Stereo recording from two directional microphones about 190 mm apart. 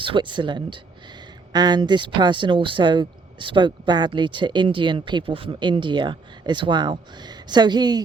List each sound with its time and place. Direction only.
0.0 s speech: 25° right (ahead or behind)